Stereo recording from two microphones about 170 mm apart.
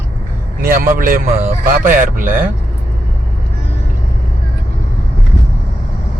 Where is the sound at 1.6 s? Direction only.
55° right (ahead or behind).